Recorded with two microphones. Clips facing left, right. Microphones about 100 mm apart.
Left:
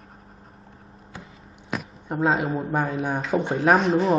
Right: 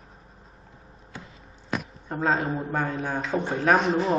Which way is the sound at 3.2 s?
Centre (ahead or behind).